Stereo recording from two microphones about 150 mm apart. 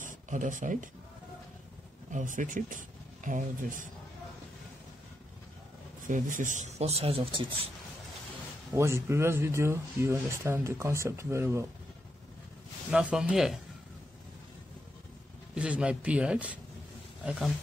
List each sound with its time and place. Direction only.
0.0 s speech: 60° right (ahead or behind)
2.0 s speech: 60° right (ahead or behind)
6.0 s a man's voice: 60° right (ahead or behind); by 7.7 s 35° right (ahead or behind)
8.7 s speech: 15° right (ahead or behind)
12.9 s speech: 5° right (ahead or behind)
15.5 s speech: 5° right (ahead or behind)